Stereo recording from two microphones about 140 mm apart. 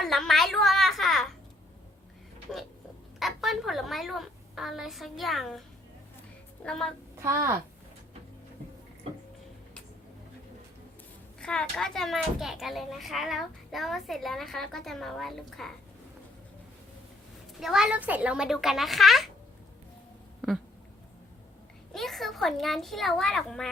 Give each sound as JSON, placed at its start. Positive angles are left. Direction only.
{"t": 0.0, "sound": "a sound", "side_deg": 0}
{"t": 3.2, "sound": "a sound", "side_deg": 0}
{"t": 6.6, "sound": "speech", "side_deg": 5}
{"t": 7.2, "sound": "a woman's voice", "side_deg": -20}
{"t": 11.3, "sound": "speech", "side_deg": 5}
{"t": 17.6, "sound": "speech", "side_deg": -5}
{"t": 21.9, "sound": "speech", "side_deg": 0}